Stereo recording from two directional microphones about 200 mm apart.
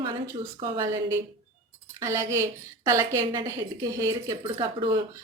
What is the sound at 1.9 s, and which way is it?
A woman's voice, 15° right (ahead or behind).